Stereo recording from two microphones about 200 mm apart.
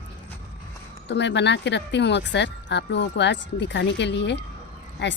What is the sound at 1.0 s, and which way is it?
Speech, 60° left (ahead or behind).